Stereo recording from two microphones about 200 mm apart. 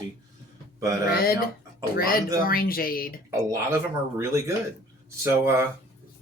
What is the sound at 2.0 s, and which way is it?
Speech, 45° left (ahead or behind).